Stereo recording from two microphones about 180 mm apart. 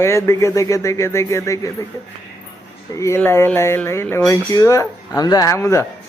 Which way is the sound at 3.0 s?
15° left (ahead or behind).